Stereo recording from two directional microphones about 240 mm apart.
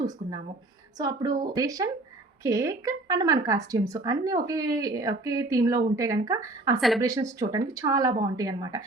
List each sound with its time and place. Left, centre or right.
0.9 s speech: centre
6.7 s a woman's voice: centre
7.0 s speech: centre